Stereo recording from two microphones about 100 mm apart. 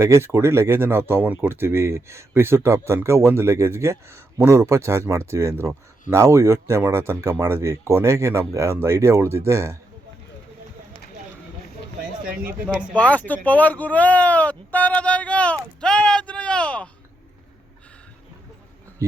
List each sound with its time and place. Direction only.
0.0 s speech: 25° right (ahead or behind)
12.6 s speech: 15° left (ahead or behind)